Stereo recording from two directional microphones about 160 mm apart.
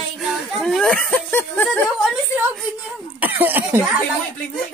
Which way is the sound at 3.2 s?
10° right (ahead or behind).